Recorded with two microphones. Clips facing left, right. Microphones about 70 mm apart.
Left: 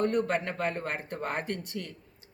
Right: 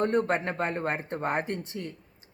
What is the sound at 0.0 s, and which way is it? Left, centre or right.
Speech, right.